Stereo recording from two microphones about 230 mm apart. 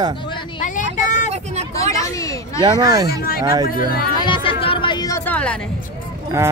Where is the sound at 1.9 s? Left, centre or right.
Centre.